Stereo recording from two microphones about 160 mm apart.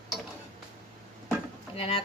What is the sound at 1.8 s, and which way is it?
Speech, 35° left (ahead or behind).